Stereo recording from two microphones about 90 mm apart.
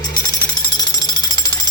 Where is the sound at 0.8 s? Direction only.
45° left (ahead or behind).